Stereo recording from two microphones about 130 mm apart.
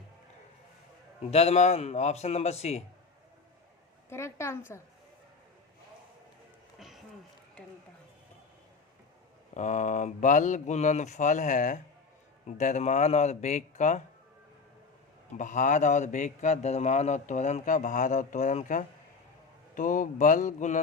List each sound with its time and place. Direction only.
1.3 s a man's voice: 55° left (ahead or behind)
4.1 s a woman's voice: 20° left (ahead or behind)
6.7 s a sound: centre (ahead or behind)
7.6 s speech: 5° left (ahead or behind)
9.6 s a man's voice: 65° left (ahead or behind)
12.5 s a man's voice: 65° left (ahead or behind)
15.4 s a man's voice: 75° left (ahead or behind)
19.7 s a man's voice: 85° left; by 20.8 s 70° left (ahead or behind)